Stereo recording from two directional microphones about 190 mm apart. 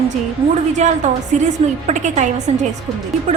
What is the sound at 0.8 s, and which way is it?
A woman's voice, 40° right (ahead or behind).